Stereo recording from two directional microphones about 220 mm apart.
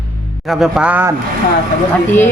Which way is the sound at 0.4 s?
Centre (ahead or behind).